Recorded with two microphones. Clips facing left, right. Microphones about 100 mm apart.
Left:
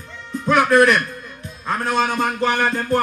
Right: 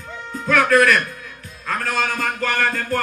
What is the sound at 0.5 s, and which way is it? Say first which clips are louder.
A man's voice: left 1 dB; 20° left (ahead or behind).